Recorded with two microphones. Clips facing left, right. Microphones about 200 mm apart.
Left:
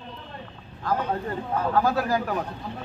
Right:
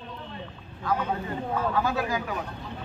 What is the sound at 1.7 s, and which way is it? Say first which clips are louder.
Speech: left 4 dB; 40° left (ahead or behind).